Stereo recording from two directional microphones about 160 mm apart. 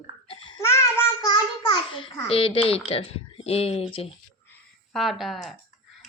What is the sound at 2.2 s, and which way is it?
Speech, 35° left (ahead or behind).